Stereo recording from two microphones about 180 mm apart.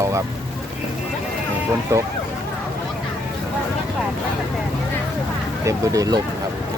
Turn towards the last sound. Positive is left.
turn(degrees=-20)  # may be behind; listen again after turning